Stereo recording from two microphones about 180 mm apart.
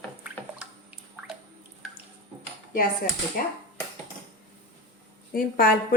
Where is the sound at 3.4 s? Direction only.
50° left (ahead or behind).